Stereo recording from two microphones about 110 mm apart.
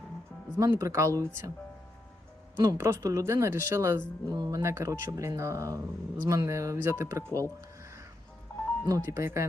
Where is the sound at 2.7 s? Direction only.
25° right (ahead or behind).